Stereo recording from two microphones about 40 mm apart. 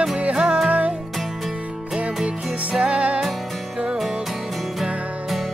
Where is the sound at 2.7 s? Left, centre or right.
Right.